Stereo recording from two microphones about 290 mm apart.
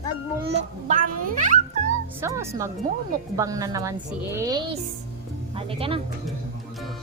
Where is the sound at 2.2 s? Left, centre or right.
Centre.